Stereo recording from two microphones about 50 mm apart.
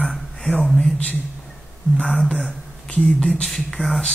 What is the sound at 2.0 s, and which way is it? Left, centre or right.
Speech, centre.